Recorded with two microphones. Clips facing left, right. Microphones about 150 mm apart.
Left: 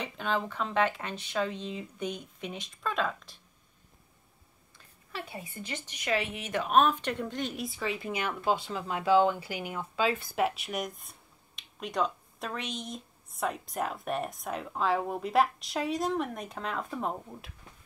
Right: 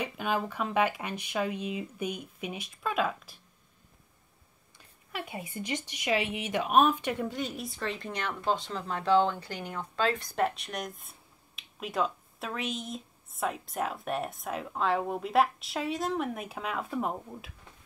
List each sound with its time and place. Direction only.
0.0 s speech: 10° right (ahead or behind)
5.1 s a woman's voice: 15° right (ahead or behind)